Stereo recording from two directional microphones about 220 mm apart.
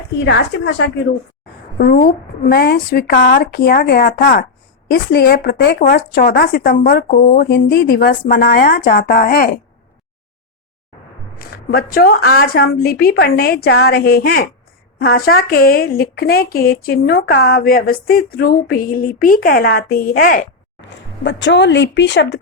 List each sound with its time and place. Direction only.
0.3 s speech: 50° left (ahead or behind)
11.3 s speech: 40° left (ahead or behind)
20.9 s speech: 55° left (ahead or behind)